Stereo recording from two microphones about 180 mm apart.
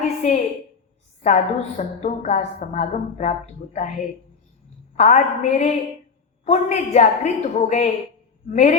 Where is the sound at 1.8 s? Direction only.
40° left (ahead or behind).